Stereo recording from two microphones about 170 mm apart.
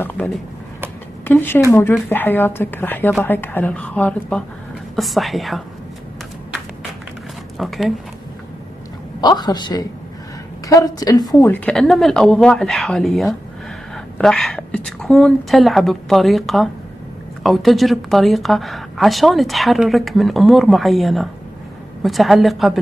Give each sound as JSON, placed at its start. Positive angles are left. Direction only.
{"t": 0.0, "sound": "a woman's voice", "side_deg": 10}
{"t": 7.5, "sound": "speech", "side_deg": 0}
{"t": 9.2, "sound": "a woman's voice", "side_deg": 25}
{"t": 11.5, "sound": "a woman's voice", "side_deg": 5}